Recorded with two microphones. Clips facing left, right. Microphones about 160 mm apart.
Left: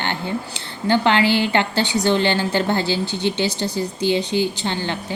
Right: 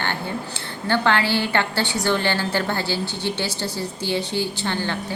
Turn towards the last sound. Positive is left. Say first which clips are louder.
# left 2 dB
turn(degrees=20)  # may be behind; listen again after turning